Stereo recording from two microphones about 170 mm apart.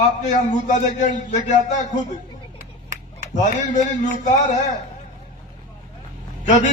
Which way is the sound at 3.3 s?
45° left (ahead or behind).